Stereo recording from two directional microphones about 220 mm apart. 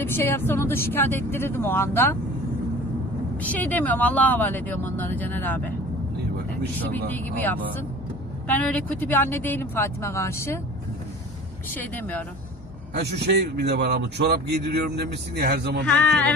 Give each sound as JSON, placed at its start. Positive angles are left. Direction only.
{"t": 0.0, "sound": "speech", "side_deg": 10}
{"t": 3.4, "sound": "speech", "side_deg": 5}
{"t": 7.1, "sound": "speech", "side_deg": 10}
{"t": 11.7, "sound": "speech", "side_deg": 10}
{"t": 13.0, "sound": "speech", "side_deg": -50}